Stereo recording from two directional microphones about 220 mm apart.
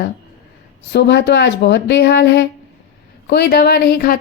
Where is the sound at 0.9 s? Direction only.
50° left (ahead or behind).